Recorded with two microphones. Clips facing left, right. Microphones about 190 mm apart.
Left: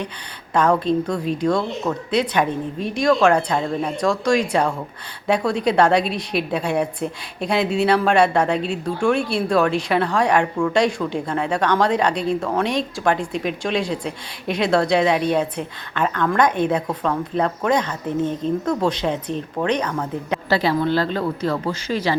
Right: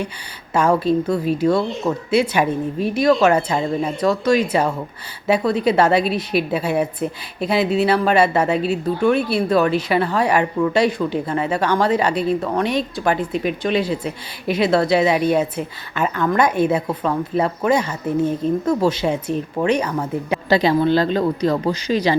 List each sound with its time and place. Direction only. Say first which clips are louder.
0.5 s a woman's voice: right 1 dB; 5° right (ahead or behind)
20.5 s speech: right 4 dB; 20° right (ahead or behind)